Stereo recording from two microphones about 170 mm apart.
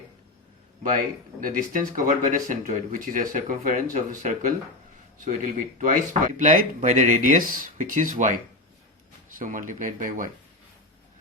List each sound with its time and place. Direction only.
1.4 s speech: 55° right (ahead or behind)
9.4 s speech: 50° right (ahead or behind)